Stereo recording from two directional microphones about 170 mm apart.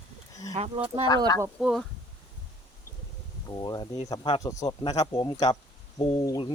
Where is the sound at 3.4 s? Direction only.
25° left (ahead or behind).